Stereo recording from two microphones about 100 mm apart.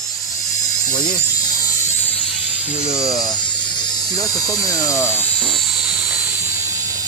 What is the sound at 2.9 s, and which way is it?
Speech, 35° left (ahead or behind).